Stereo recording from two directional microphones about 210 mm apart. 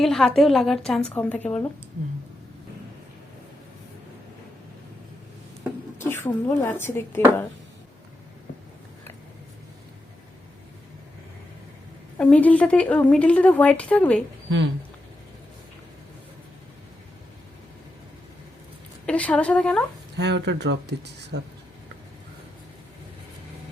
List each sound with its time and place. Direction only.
0.0 s a woman's voice: centre (ahead or behind)
6.0 s a woman's voice: 10° left (ahead or behind)
12.1 s a woman's voice: 5° left (ahead or behind)
19.0 s a woman's voice: 5° left (ahead or behind)
20.1 s speech: 55° right (ahead or behind)